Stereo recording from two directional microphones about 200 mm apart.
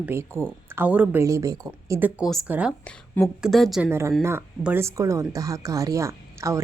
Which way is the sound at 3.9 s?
15° right (ahead or behind).